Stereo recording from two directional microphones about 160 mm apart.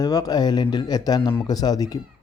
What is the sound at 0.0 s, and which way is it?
A man's voice, 25° left (ahead or behind).